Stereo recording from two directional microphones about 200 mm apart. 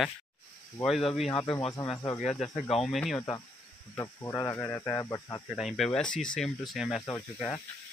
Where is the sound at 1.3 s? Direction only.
25° left (ahead or behind).